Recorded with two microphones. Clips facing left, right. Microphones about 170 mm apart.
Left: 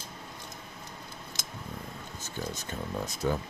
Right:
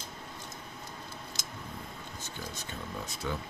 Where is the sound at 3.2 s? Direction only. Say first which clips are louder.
Left 6 dB; 45° left (ahead or behind).